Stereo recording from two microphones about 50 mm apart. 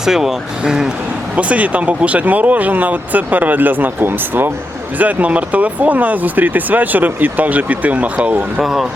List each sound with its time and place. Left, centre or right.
0.0 s speech: centre
1.4 s speech: right
4.9 s speech: right
8.6 s speech: centre